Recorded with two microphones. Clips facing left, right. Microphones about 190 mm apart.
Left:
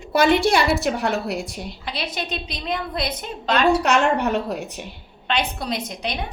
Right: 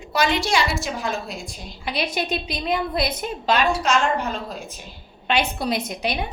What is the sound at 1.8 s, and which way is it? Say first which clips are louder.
A woman's voice: right 5 dB; 10° right (ahead or behind).